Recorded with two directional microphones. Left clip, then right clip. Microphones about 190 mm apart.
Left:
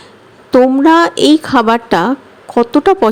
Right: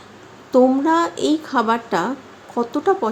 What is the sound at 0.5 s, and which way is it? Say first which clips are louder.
A woman's voice: left 7 dB; 40° left (ahead or behind).